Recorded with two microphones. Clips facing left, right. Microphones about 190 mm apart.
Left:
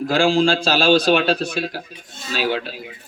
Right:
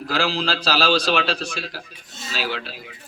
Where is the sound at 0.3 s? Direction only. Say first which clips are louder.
Left 7 dB; 50° left (ahead or behind).